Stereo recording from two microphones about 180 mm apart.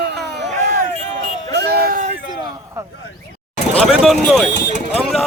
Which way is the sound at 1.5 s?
65° right (ahead or behind).